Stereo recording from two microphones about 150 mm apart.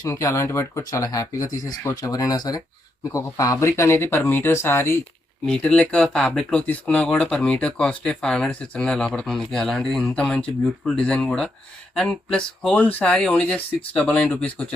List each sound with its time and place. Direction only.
0.0 s speech: 20° left (ahead or behind)